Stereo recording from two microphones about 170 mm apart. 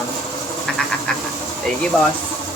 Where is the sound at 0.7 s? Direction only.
5° left (ahead or behind).